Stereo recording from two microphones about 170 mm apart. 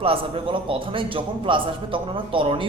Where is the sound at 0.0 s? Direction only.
30° right (ahead or behind).